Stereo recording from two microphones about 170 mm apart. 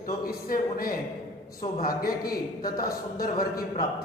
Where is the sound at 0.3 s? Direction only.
60° left (ahead or behind).